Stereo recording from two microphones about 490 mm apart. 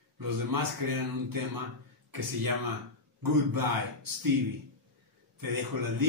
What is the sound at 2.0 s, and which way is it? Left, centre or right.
A man's voice, right.